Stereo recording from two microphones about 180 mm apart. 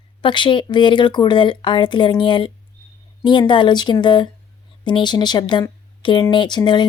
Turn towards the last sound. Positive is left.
turn(degrees=25)  # may be behind; listen again after turning